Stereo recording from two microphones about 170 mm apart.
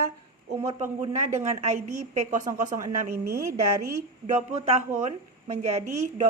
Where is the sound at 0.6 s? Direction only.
45° right (ahead or behind).